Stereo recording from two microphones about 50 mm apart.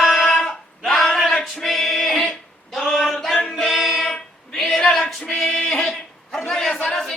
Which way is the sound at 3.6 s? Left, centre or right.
Centre.